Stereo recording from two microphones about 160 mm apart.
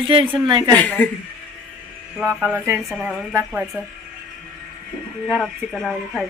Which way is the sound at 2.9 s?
5° right (ahead or behind).